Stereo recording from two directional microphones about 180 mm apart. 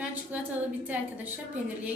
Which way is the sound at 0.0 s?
10° right (ahead or behind).